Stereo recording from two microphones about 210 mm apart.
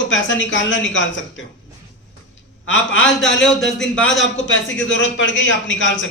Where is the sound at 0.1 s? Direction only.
65° left (ahead or behind).